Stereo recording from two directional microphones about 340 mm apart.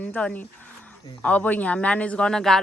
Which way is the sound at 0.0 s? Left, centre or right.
Centre.